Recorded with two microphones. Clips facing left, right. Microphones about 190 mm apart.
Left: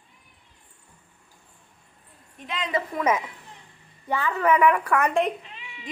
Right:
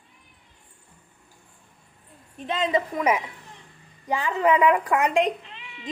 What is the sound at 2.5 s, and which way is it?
A woman's voice, 25° right (ahead or behind).